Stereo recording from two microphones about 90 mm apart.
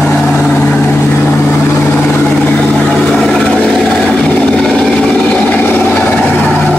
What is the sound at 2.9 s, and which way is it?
Vehicle, 5° left (ahead or behind).